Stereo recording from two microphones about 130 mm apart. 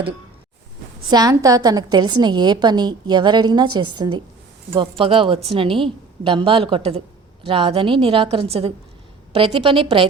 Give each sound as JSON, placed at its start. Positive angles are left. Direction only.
{"t": 1.1, "sound": "a woman's voice", "side_deg": -30}
{"t": 4.7, "sound": "a woman's voice", "side_deg": -45}